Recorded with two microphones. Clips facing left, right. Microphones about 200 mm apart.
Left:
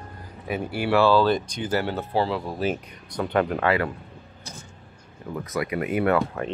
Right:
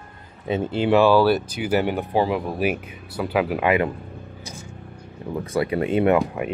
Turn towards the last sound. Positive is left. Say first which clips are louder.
# right 3 dB
turn(degrees=-15)  # may be behind; listen again after turning